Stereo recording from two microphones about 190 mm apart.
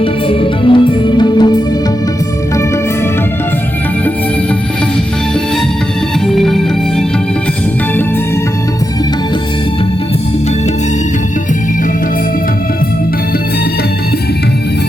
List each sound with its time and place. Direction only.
0.0 s music: 30° left (ahead or behind)
6.2 s music: centre (ahead or behind)